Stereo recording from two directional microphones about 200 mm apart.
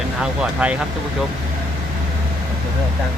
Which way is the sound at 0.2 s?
5° right (ahead or behind).